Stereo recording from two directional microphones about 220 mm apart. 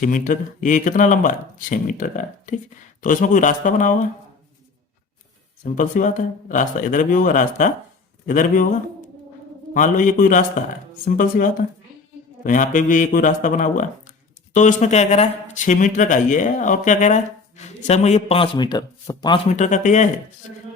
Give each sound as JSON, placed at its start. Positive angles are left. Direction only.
{"t": 0.0, "sound": "speech", "side_deg": 35}
{"t": 5.6, "sound": "speech", "side_deg": 35}
{"t": 9.7, "sound": "speech", "side_deg": 35}